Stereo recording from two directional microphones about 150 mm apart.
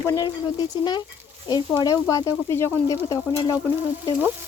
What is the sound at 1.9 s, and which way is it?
Speech, 25° left (ahead or behind).